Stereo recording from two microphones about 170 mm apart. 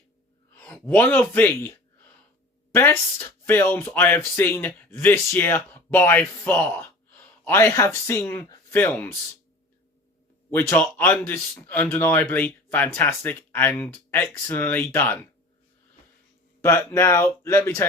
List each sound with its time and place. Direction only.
0.6 s speech: 10° left (ahead or behind)
10.5 s speech: 10° left (ahead or behind)
16.6 s speech: 15° left (ahead or behind)